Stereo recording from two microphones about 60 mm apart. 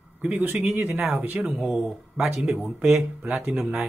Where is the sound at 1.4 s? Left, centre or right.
Right.